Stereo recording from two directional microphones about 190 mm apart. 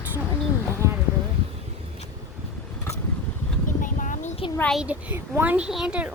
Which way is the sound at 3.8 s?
40° left (ahead or behind).